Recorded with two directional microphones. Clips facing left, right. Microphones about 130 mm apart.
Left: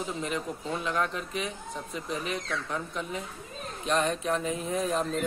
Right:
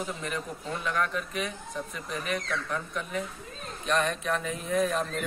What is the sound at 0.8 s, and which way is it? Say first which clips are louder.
Speech: right 2 dB; 25° left (ahead or behind).